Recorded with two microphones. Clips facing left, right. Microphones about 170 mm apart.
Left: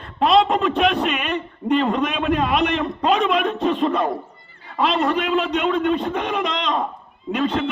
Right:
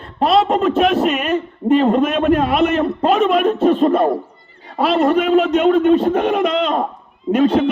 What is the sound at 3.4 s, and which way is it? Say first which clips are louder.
Music: right 6 dB; 40° right (ahead or behind).